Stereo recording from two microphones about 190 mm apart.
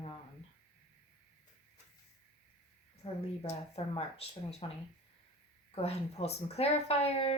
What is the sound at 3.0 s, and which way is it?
Speech, 30° left (ahead or behind).